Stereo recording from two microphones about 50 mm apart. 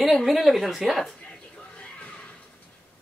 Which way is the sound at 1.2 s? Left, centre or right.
Left.